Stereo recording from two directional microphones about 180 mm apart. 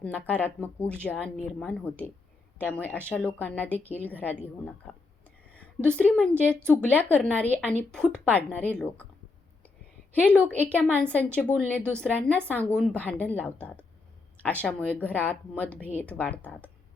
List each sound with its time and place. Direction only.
0.0 s a woman's voice: 10° left (ahead or behind)
10.2 s a woman's voice: 10° left (ahead or behind)